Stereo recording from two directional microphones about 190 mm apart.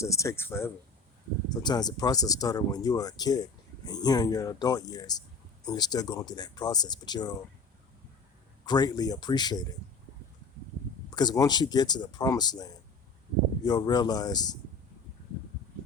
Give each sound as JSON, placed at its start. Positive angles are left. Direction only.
{"t": 0.0, "sound": "speech", "side_deg": 15}
{"t": 8.6, "sound": "speech", "side_deg": 20}
{"t": 11.1, "sound": "speech", "side_deg": 20}